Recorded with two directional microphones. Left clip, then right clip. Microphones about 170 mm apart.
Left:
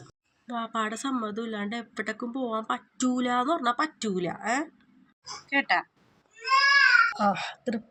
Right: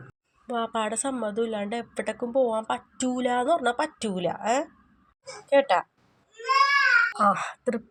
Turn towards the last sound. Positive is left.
turn(degrees=-5)  # may be behind; listen again after turning